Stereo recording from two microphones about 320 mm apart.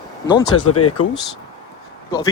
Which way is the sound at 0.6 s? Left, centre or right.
Left.